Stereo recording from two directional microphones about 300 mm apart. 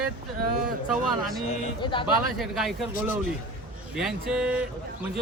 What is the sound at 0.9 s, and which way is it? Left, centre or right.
Speech, centre.